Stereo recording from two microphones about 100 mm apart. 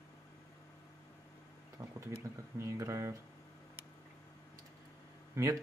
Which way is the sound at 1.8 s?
45° right (ahead or behind).